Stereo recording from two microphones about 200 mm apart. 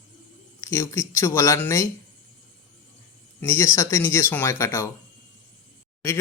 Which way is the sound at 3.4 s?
15° left (ahead or behind).